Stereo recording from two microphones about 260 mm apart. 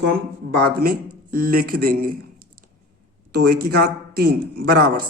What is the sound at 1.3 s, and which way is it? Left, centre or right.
Speech, right.